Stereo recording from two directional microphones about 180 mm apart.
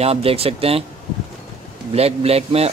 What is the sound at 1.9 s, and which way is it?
Speech, 35° right (ahead or behind).